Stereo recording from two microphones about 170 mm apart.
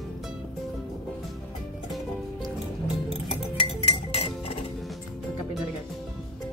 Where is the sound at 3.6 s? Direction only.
35° left (ahead or behind).